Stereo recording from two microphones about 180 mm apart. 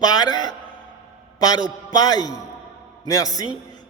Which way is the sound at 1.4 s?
20° left (ahead or behind).